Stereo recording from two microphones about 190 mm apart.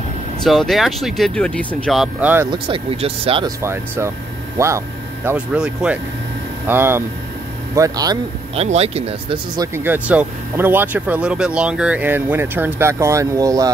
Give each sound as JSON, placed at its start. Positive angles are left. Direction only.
{"t": 0.4, "sound": "speech", "side_deg": 0}
{"t": 2.5, "sound": "speech", "side_deg": -30}
{"t": 3.4, "sound": "speech", "side_deg": -15}
{"t": 8.5, "sound": "speech", "side_deg": -35}
{"t": 9.6, "sound": "speech", "side_deg": -10}